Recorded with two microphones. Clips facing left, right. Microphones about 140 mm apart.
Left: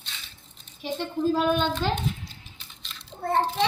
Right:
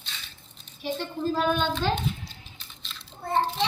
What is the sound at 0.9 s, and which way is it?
Speech, 15° left (ahead or behind).